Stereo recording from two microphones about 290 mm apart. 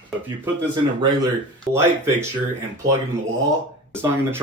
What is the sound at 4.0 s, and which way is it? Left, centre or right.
Speech, centre.